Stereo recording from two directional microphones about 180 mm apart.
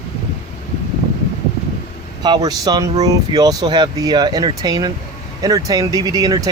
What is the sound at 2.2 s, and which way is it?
Speech, 25° right (ahead or behind).